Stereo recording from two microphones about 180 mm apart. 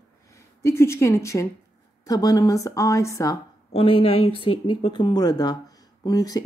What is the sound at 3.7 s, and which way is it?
A woman's voice, 30° left (ahead or behind).